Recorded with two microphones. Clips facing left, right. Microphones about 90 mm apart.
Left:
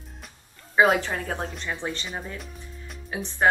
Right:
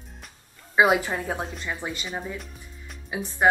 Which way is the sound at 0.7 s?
10° right (ahead or behind).